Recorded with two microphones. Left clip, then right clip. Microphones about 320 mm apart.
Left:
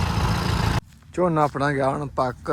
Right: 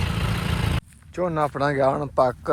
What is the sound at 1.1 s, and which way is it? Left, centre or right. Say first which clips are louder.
Speech: left 3 dB; centre.